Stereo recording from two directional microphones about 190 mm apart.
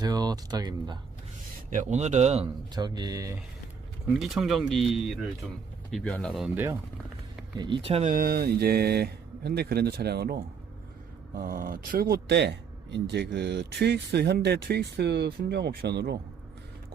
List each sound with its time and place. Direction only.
0.0 s speech: 20° right (ahead or behind)
1.7 s speech: 40° right (ahead or behind)
2.7 s speech: 20° right (ahead or behind)
4.1 s speech: centre (ahead or behind)
6.5 s speech: 10° right (ahead or behind)
7.6 s speech: 25° right (ahead or behind)
8.1 s speech: 50° right (ahead or behind)